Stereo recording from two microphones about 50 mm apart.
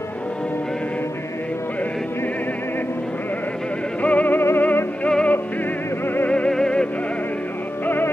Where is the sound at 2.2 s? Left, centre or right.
Left.